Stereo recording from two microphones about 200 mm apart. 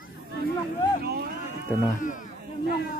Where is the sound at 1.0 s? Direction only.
50° right (ahead or behind).